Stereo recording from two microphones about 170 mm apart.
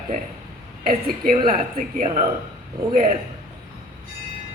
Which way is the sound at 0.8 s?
55° right (ahead or behind).